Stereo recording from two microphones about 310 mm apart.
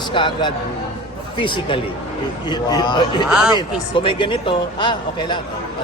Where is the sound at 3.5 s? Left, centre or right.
Centre.